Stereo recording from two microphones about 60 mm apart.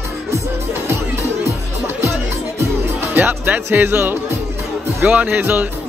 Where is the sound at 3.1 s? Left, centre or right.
Right.